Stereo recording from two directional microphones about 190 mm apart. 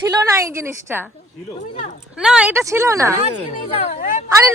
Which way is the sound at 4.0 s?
45° left (ahead or behind).